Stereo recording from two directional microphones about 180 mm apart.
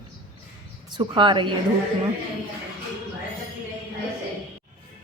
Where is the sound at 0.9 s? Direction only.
25° right (ahead or behind).